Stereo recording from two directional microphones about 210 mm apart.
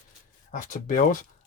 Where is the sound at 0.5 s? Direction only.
40° left (ahead or behind).